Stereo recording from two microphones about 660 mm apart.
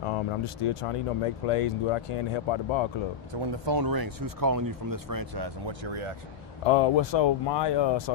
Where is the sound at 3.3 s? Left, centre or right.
Right.